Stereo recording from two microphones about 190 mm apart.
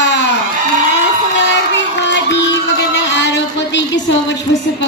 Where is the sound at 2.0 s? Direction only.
65° left (ahead or behind).